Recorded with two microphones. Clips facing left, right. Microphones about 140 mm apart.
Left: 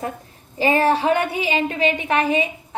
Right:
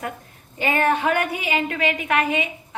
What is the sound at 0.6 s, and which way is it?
A woman's voice, 30° left (ahead or behind).